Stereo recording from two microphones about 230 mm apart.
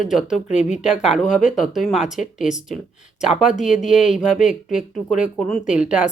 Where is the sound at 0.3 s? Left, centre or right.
Left.